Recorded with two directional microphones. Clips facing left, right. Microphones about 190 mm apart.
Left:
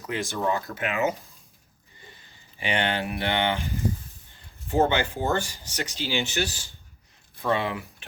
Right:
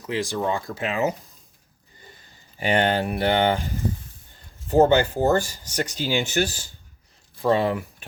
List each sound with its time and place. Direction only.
0.1 s speech: 25° right (ahead or behind)
2.6 s speech: 40° right (ahead or behind)
4.7 s speech: 40° right (ahead or behind)